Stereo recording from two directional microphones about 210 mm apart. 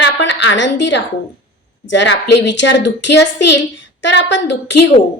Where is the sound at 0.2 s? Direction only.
60° left (ahead or behind).